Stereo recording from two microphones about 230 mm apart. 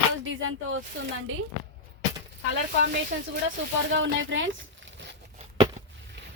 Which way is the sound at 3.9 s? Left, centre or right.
Right.